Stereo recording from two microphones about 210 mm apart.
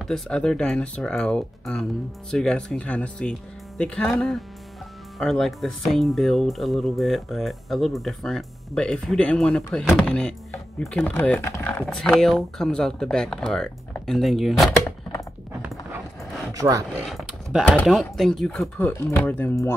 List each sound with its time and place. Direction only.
0.0 s speech: 5° left (ahead or behind)
16.5 s speech: 15° right (ahead or behind)
17.0 s a sound: centre (ahead or behind)
17.7 s speech: 5° left (ahead or behind)